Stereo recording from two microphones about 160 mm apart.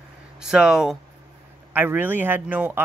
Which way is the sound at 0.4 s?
5° right (ahead or behind).